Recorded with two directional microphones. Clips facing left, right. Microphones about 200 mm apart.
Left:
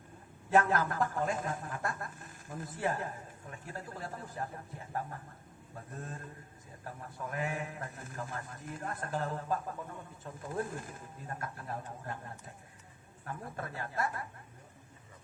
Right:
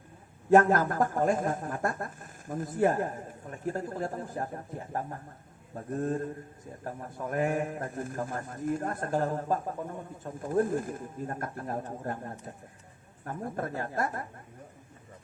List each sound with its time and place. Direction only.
0.5 s a man's voice: 45° right (ahead or behind)